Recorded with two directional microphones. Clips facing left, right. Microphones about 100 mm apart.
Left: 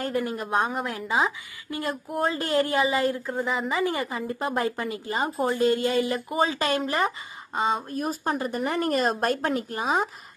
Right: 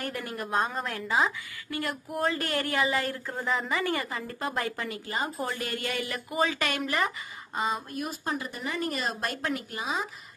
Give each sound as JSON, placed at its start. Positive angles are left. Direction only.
{"t": 0.0, "sound": "a woman's voice", "side_deg": 20}
{"t": 3.3, "sound": "a woman's voice", "side_deg": 5}
{"t": 3.6, "sound": "a woman's voice", "side_deg": 20}
{"t": 8.3, "sound": "speech", "side_deg": 50}